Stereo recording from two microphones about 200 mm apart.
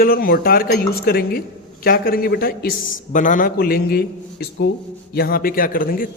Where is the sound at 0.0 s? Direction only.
45° left (ahead or behind).